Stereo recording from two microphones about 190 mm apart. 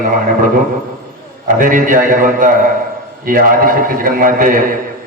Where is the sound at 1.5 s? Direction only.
45° right (ahead or behind).